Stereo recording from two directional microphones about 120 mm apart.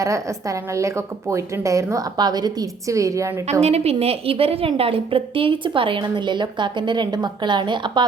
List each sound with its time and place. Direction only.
0.0 s a woman's voice: 25° right (ahead or behind)
3.6 s a woman's voice: 60° right (ahead or behind); by 8.0 s 40° right (ahead or behind)